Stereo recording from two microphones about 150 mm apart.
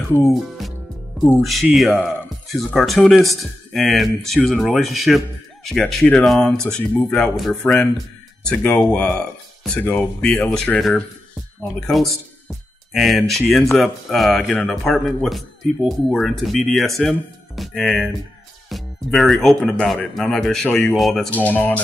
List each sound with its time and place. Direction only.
0.3 s music: centre (ahead or behind)
1.4 s speech: centre (ahead or behind)